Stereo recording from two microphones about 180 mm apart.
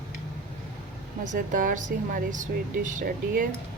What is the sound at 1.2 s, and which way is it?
Speech, 45° right (ahead or behind).